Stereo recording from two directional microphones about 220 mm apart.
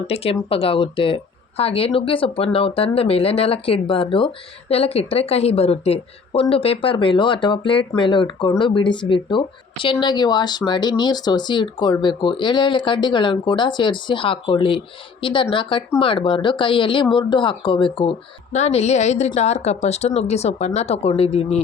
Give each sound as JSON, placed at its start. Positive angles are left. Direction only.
{"t": 0.1, "sound": "speech", "side_deg": 25}